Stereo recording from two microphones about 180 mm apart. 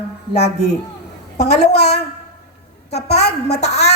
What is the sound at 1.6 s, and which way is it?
Speech, 65° left (ahead or behind).